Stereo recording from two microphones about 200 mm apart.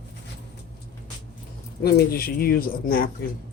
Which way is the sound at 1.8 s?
50° left (ahead or behind).